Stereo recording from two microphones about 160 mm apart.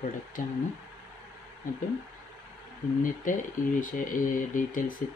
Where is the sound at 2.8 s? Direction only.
50° left (ahead or behind).